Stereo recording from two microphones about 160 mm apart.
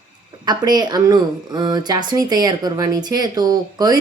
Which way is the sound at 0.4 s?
25° right (ahead or behind).